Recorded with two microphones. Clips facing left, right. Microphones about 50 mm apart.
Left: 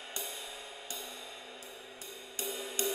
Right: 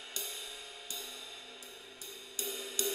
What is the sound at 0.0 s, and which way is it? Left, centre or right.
Music, centre.